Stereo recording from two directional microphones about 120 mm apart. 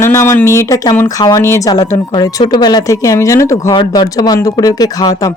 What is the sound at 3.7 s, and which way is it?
Speech, 40° left (ahead or behind).